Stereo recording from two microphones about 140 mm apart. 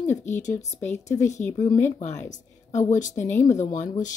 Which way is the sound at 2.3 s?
60° left (ahead or behind).